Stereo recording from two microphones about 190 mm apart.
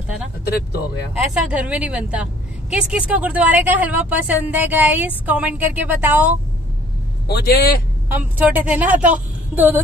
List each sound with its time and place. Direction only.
1.2 s a woman's voice: 5° right (ahead or behind)
7.2 s a man's voice: 55° left (ahead or behind)
8.1 s a woman's voice: 10° right (ahead or behind)